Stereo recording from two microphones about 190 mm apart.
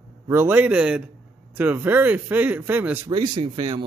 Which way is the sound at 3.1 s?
25° right (ahead or behind).